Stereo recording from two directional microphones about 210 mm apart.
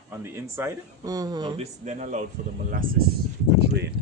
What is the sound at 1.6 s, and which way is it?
Speech, 35° right (ahead or behind).